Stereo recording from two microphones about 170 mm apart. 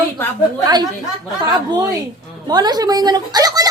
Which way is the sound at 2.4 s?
25° right (ahead or behind).